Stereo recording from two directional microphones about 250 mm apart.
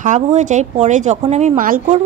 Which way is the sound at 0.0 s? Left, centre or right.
Right.